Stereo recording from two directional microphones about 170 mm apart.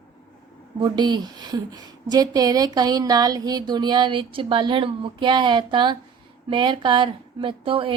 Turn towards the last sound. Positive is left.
turn(degrees=-30)  # may be behind; listen again after turning